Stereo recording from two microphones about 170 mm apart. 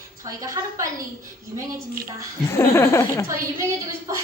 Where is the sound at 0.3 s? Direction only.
20° right (ahead or behind).